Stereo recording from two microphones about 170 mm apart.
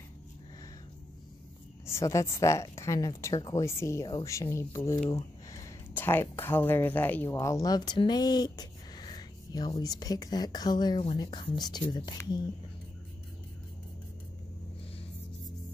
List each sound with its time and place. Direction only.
1.9 s speech: 15° left (ahead or behind)